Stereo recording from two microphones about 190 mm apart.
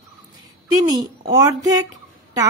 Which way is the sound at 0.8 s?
20° right (ahead or behind).